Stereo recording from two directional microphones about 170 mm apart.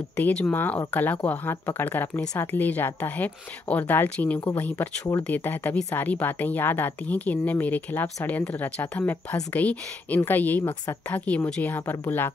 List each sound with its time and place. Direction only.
0.1 s speech: 5° left (ahead or behind)
10.6 s a woman's voice: 20° left (ahead or behind)
11.1 s speech: 10° left (ahead or behind)